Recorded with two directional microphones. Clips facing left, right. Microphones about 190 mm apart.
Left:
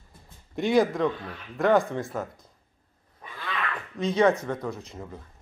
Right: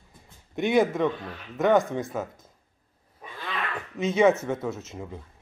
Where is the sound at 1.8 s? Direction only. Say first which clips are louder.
Right 1 dB; 20° right (ahead or behind).